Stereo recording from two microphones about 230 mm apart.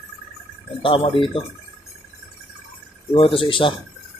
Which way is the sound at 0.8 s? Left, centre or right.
Left.